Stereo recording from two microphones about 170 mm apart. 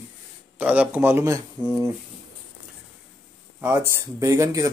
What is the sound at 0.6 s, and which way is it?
Speech, 10° right (ahead or behind).